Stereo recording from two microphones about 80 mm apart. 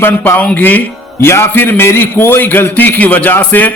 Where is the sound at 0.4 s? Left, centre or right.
Left.